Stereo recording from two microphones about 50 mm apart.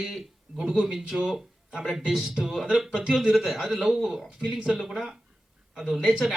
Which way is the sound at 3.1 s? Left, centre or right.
Centre.